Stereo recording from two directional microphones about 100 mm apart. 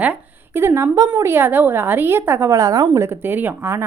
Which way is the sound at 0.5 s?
25° right (ahead or behind).